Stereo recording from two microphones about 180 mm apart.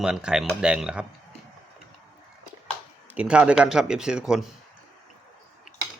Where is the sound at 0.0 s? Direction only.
5° right (ahead or behind).